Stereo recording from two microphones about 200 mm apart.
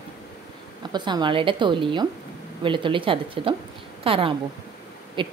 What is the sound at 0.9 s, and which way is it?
A woman's voice, 20° right (ahead or behind).